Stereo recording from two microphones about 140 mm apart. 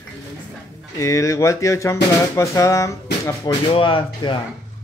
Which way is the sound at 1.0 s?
25° left (ahead or behind).